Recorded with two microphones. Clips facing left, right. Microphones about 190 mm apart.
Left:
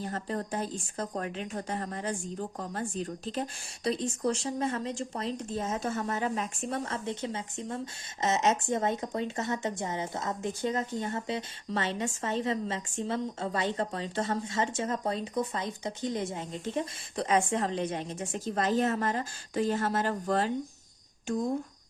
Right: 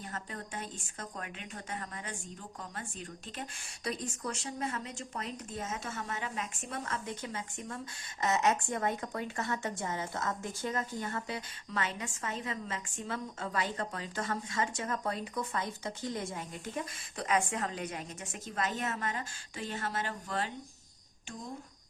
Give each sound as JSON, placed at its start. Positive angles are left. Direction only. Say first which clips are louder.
{"t": 0.0, "sound": "a woman's voice", "louder": "left 9 dB", "side_deg": 35}